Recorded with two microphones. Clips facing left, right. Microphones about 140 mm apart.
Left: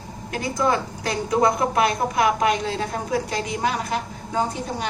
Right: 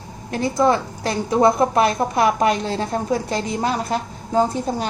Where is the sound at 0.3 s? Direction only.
30° right (ahead or behind).